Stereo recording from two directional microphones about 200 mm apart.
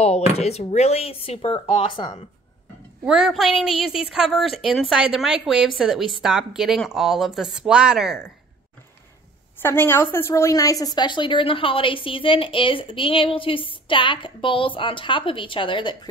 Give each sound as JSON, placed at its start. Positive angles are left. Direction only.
{"t": 0.0, "sound": "speech", "side_deg": 30}
{"t": 3.1, "sound": "a woman's voice", "side_deg": 0}
{"t": 9.6, "sound": "a woman's voice", "side_deg": 10}